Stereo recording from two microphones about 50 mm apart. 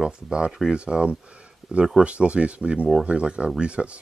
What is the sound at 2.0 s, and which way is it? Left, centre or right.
Speech, right.